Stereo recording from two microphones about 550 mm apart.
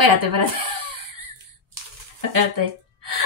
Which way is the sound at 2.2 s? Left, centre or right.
Right.